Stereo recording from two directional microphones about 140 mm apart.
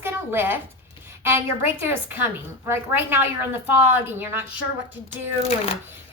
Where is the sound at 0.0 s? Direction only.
15° right (ahead or behind).